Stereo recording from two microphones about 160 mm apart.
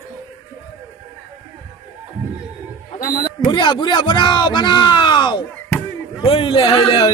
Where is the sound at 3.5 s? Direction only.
30° left (ahead or behind).